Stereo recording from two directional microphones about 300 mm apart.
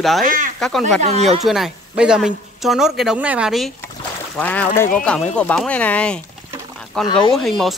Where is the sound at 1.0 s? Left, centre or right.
Right.